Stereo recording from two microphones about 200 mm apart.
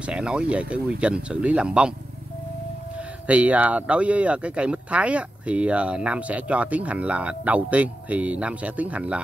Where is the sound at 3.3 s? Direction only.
5° right (ahead or behind).